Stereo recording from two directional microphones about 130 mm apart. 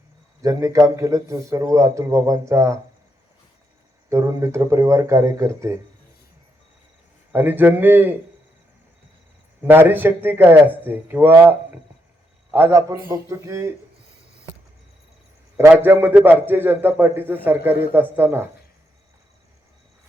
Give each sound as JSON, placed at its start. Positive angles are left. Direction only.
{"t": 0.4, "sound": "a man's voice", "side_deg": -25}
{"t": 4.1, "sound": "a man's voice", "side_deg": -25}
{"t": 7.3, "sound": "a man's voice", "side_deg": -15}
{"t": 9.6, "sound": "a man's voice", "side_deg": -15}
{"t": 15.5, "sound": "a man's voice", "side_deg": -15}